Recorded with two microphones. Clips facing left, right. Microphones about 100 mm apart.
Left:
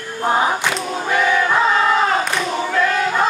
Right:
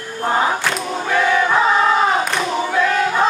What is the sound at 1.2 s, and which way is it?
Choir, 20° right (ahead or behind).